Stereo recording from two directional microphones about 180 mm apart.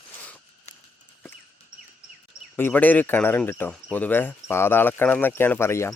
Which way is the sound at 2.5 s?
10° left (ahead or behind).